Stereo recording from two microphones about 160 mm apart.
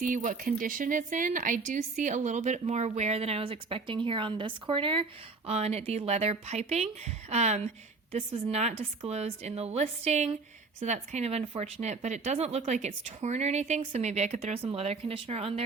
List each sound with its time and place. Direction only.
0.0 s a woman's voice: 55° right (ahead or behind); by 15.6 s 40° right (ahead or behind)